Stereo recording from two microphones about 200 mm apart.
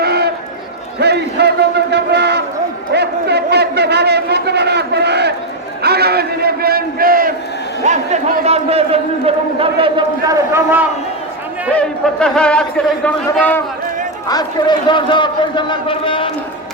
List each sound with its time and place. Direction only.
0.0 s run: 55° right (ahead or behind)
0.9 s a man's voice: 55° right (ahead or behind)
7.9 s a man's voice: 35° right (ahead or behind); by 10.8 s 10° right (ahead or behind)
11.7 s a man's voice: 5° left (ahead or behind)
14.3 s a man's voice: 20° left (ahead or behind)